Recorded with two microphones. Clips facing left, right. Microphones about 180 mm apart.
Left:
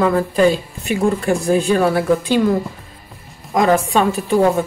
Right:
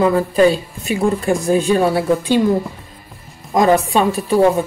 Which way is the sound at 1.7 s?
15° right (ahead or behind).